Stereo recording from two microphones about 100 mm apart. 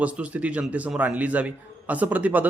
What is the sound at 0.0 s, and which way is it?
A man's voice, 15° right (ahead or behind).